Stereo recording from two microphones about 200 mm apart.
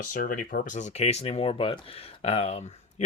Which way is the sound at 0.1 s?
45° left (ahead or behind).